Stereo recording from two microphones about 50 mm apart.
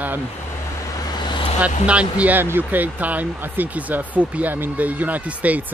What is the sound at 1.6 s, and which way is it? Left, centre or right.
Speech, right.